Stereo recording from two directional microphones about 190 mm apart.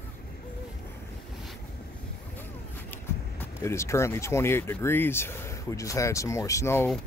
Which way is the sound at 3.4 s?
15° left (ahead or behind).